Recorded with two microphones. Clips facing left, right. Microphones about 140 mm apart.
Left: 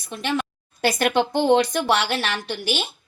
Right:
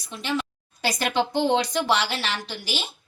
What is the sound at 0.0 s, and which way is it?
A woman's voice, 60° left (ahead or behind).